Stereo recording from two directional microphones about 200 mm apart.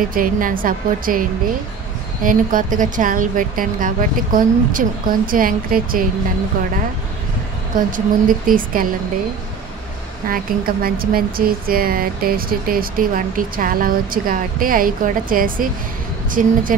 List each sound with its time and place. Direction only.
0.1 s speech: 45° right (ahead or behind)
2.2 s speech: 40° right (ahead or behind)
7.7 s speech: 45° right (ahead or behind)
10.2 s speech: 45° right (ahead or behind)